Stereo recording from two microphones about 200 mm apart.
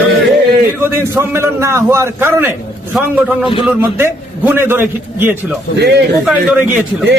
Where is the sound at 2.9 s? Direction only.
Centre (ahead or behind).